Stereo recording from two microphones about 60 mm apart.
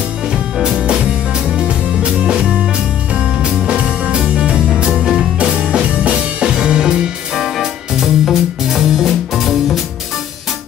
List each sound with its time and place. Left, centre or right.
0.6 s music: centre